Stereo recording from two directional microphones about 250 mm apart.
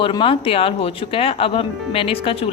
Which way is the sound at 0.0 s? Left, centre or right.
Left.